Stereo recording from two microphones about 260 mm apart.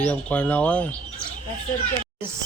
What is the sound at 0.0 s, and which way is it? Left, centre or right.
Speech, centre.